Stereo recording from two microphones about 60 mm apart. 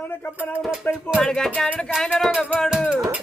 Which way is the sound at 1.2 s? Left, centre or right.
Centre.